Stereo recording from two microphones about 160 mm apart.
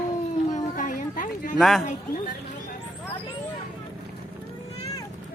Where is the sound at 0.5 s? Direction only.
55° left (ahead or behind).